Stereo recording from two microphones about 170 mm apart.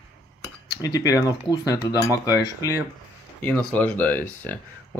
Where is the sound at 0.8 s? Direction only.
20° left (ahead or behind).